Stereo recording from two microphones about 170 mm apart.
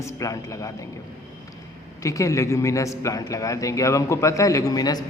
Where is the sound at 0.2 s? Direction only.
20° left (ahead or behind).